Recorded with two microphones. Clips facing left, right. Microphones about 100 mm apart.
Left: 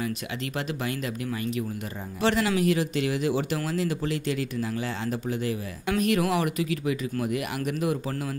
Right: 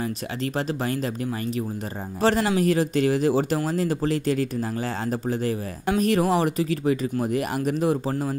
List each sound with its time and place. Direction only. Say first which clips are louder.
0.6 s a man's voice: right 4 dB; 35° right (ahead or behind)